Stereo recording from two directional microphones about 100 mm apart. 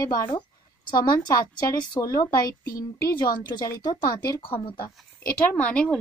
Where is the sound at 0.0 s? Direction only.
35° left (ahead or behind).